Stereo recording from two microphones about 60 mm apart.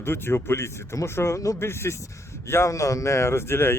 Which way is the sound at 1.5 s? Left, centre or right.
Left.